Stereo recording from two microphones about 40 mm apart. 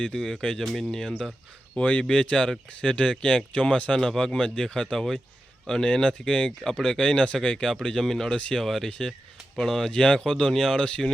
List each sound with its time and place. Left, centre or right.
0.6 s speech: centre
1.7 s speech: left; by 8.3 s centre
8.3 s speech: left
8.6 s speech: centre
10.0 s speech: left